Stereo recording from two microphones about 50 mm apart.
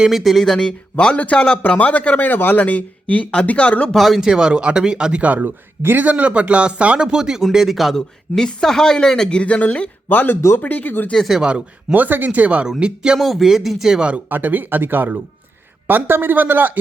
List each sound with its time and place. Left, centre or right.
0.1 s speech: centre
0.9 s a man's voice: left
3.8 s speech: centre
4.3 s speech: centre; by 5.5 s right
5.5 s speech: right; by 7.9 s centre
7.9 s a man's voice: centre
9.4 s a man's voice: left
11.4 s speech: right
11.9 s speech: right
12.8 s speech: centre
13.1 s speech: centre
14.3 s speech: right